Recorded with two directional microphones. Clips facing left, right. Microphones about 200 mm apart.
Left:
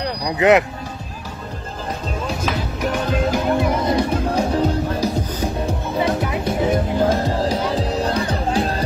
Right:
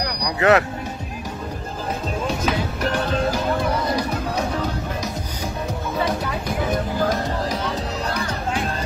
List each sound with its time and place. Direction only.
0.0 s speech: 20° left (ahead or behind)
2.2 s music: centre (ahead or behind)
2.8 s music: 15° left (ahead or behind); by 8.8 s 35° left (ahead or behind)